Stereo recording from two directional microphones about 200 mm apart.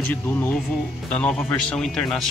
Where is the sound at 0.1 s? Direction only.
10° left (ahead or behind).